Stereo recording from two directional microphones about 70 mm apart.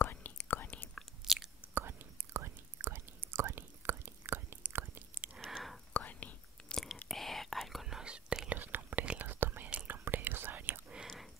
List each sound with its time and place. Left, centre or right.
0.0 s whispering: left
1.2 s chewing: centre
1.7 s chewing: right
2.3 s whispering: right
5.4 s whispering: centre
5.9 s whispering: left
6.7 s whispering: centre
8.5 s whispering: right